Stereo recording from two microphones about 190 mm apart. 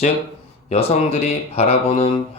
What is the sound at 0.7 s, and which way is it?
Speech, 35° left (ahead or behind).